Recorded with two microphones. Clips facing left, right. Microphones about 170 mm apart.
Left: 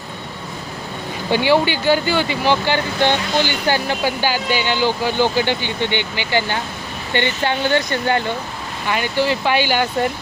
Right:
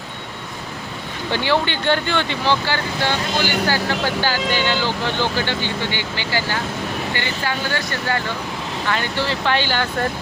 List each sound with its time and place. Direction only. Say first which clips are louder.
1.3 s speech: left 4 dB; 15° left (ahead or behind)